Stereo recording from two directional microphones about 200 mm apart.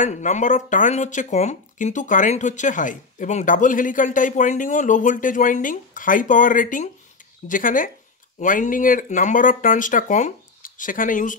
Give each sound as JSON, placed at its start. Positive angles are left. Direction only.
{"t": 0.0, "sound": "speech", "side_deg": 35}